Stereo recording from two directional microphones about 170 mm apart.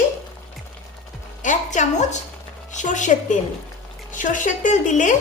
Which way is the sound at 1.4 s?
45° left (ahead or behind).